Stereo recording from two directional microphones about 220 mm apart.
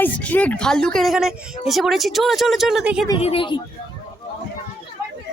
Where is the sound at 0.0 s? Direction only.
5° left (ahead or behind).